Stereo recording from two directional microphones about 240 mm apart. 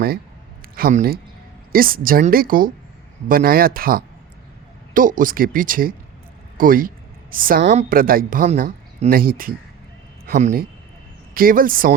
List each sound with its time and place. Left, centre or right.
0.8 s a woman's voice: right